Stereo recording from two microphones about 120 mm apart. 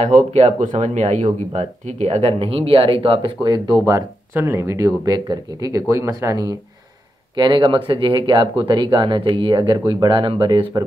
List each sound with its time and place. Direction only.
0.3 s speech: 65° right (ahead or behind); by 6.5 s 30° right (ahead or behind)
7.3 s speech: 40° right (ahead or behind)